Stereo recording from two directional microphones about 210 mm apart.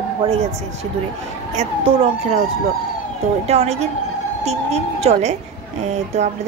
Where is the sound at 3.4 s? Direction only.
30° right (ahead or behind).